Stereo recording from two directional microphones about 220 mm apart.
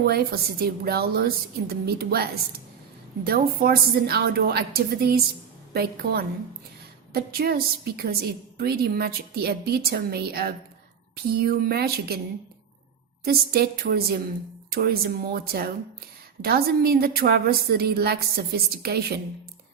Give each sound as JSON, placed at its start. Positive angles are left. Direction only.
{"t": 0.0, "sound": "a woman's voice", "side_deg": -45}
{"t": 13.2, "sound": "a woman's voice", "side_deg": -45}